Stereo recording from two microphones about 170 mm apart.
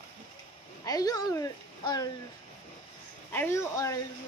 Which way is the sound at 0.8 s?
20° left (ahead or behind).